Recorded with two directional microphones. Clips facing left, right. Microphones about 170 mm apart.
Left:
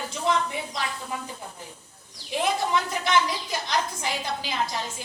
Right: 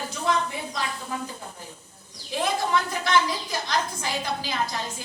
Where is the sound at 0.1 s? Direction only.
20° left (ahead or behind).